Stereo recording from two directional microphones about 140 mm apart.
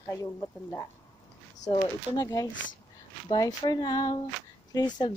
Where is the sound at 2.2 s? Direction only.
25° left (ahead or behind).